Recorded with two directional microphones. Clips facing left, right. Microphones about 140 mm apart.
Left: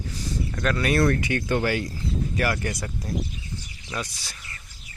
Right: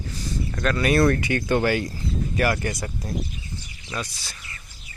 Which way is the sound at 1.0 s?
75° right (ahead or behind).